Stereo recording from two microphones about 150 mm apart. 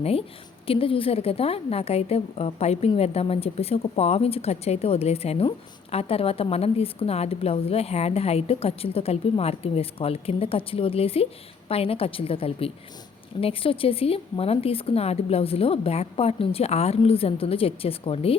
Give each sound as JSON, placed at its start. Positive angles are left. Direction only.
{"t": 0.0, "sound": "a woman's voice", "side_deg": 40}